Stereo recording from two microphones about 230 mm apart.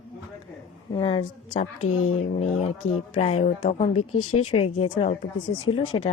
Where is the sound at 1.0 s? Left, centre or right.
Left.